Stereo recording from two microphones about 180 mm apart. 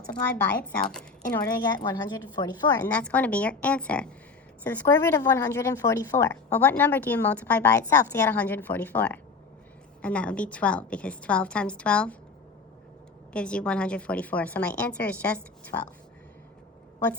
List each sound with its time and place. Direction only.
0.1 s a woman's voice: 10° left (ahead or behind)
1.5 s a woman's voice: 20° left (ahead or behind)
2.8 s a woman's voice: 10° left (ahead or behind)
13.3 s a woman's voice: 5° left (ahead or behind)